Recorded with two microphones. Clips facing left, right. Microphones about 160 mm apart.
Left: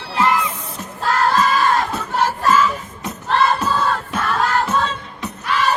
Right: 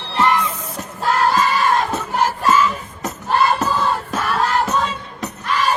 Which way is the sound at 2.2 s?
10° right (ahead or behind).